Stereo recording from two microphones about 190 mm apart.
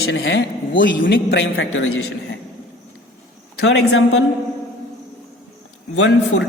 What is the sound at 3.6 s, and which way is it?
Speech, 75° left (ahead or behind).